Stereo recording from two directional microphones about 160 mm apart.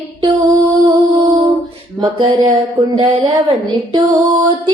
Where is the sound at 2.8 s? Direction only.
20° right (ahead or behind).